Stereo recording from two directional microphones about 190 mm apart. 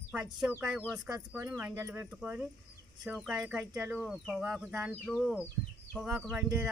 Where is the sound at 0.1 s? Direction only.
10° right (ahead or behind).